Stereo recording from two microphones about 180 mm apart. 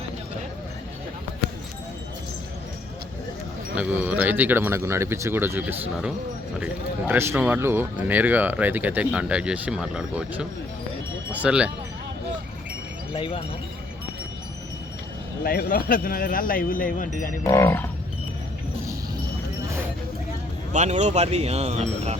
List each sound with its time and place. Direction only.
3.8 s speech: 10° right (ahead or behind)
13.1 s speech: 30° left (ahead or behind)
15.4 s speech: 50° left (ahead or behind)
17.4 s livestock: 15° left (ahead or behind)
20.7 s speech: 40° right (ahead or behind)